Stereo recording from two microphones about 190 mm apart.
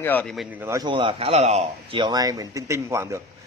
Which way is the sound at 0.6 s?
15° right (ahead or behind).